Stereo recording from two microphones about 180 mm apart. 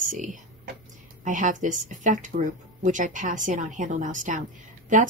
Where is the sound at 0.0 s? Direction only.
45° right (ahead or behind).